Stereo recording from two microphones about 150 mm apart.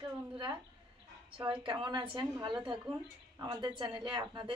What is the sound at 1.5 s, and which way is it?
A woman's voice, 35° right (ahead or behind).